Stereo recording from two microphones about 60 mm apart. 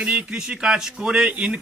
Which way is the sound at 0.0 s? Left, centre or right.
Centre.